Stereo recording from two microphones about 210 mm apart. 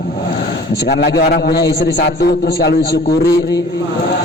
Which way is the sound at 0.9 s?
50° left (ahead or behind).